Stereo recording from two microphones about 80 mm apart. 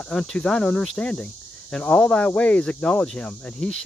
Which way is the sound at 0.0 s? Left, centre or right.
Centre.